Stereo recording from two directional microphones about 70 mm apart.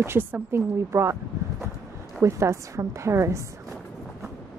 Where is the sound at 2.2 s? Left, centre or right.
Right.